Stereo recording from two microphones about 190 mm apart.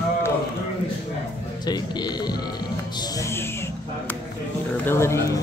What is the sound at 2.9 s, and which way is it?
Music, 15° left (ahead or behind).